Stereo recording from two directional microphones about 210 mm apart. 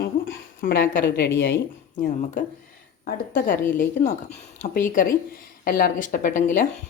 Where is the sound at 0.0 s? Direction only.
45° left (ahead or behind).